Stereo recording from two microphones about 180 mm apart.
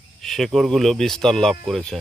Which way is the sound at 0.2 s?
Centre (ahead or behind).